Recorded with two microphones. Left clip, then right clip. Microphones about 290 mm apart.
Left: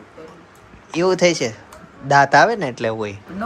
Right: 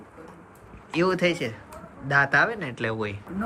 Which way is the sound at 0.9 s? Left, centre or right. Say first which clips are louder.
Left 7 dB; centre.